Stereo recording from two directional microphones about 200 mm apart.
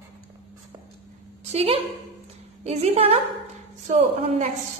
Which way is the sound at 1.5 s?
30° right (ahead or behind).